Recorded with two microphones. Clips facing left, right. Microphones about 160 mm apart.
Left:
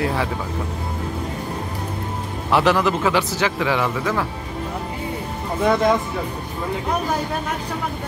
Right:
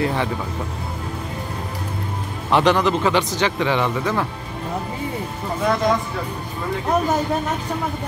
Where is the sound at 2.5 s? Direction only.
5° left (ahead or behind).